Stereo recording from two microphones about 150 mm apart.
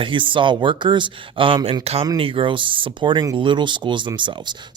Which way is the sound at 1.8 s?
40° right (ahead or behind).